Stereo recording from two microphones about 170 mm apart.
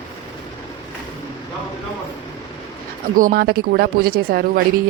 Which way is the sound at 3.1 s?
60° right (ahead or behind).